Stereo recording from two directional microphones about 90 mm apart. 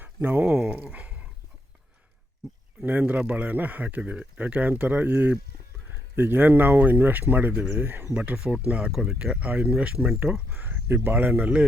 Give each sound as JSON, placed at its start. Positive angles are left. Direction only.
{"t": 0.0, "sound": "dog", "side_deg": -20}
{"t": 0.4, "sound": "speech", "side_deg": -10}
{"t": 0.9, "sound": "dog", "side_deg": -15}
{"t": 2.8, "sound": "speech", "side_deg": -15}